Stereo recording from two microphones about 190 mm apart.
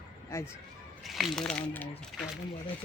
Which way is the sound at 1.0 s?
Centre (ahead or behind).